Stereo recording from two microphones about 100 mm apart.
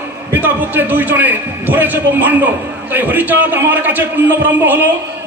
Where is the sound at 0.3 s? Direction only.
20° right (ahead or behind).